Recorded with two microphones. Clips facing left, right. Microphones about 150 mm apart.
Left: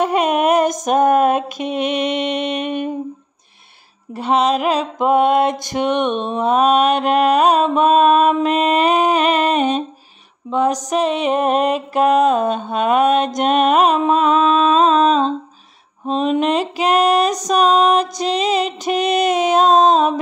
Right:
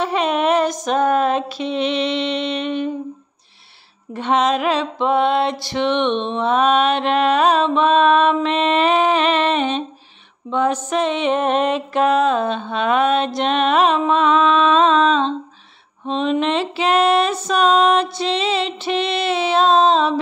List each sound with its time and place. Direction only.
0.0 s a sound: 45° left (ahead or behind)
1.1 s mantra: 45° left (ahead or behind)
4.1 s music: 35° left (ahead or behind)
5.0 s mantra: 45° left (ahead or behind)
8.5 s music: 40° left (ahead or behind)